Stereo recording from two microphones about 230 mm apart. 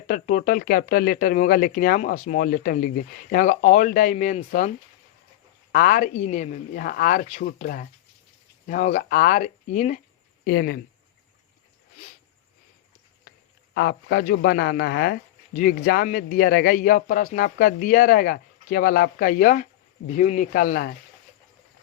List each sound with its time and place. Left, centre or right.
0.1 s speech: left
5.7 s speech: left
13.7 s speech: left